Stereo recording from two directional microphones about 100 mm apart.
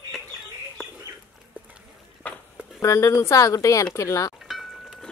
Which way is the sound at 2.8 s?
30° left (ahead or behind).